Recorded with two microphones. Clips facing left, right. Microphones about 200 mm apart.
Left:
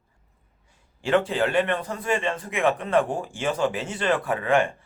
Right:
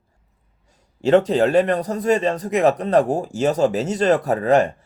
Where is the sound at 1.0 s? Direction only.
40° right (ahead or behind).